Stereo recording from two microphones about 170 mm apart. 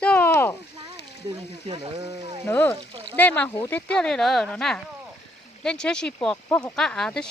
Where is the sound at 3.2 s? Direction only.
10° left (ahead or behind).